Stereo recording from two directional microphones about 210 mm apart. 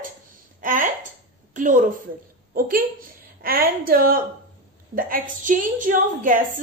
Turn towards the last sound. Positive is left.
turn(degrees=-40)  # may be behind; listen again after turning